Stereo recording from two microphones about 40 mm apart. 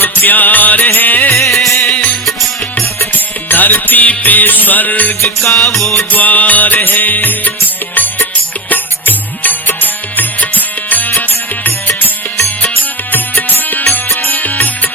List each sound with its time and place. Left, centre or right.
0.0 s music: left
1.3 s music: centre
1.9 s music: left
3.1 s music: left
5.4 s music: centre
6.1 s music: left